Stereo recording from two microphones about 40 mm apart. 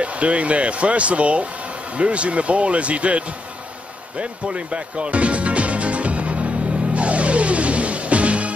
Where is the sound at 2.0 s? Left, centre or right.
Right.